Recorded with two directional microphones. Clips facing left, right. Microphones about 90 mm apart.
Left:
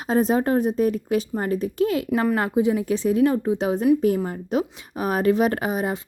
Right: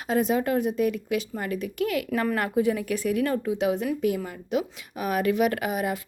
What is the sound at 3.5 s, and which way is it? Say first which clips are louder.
Speech: left 6 dB; 35° left (ahead or behind).